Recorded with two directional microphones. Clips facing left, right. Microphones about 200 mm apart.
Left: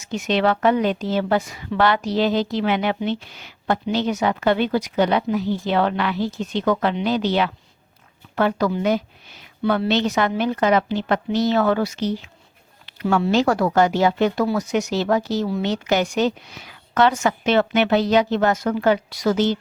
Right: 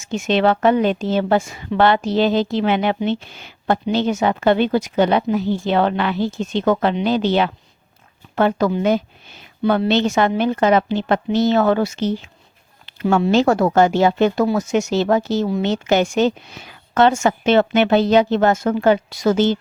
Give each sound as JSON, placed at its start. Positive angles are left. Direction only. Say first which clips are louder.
{"t": 0.0, "sound": "a woman's voice", "louder": "right 3 dB", "side_deg": -25}